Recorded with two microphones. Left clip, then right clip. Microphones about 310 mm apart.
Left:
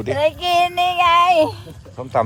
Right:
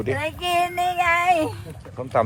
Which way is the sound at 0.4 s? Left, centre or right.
Centre.